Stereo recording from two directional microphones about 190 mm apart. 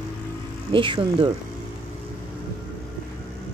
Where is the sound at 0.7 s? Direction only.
25° right (ahead or behind).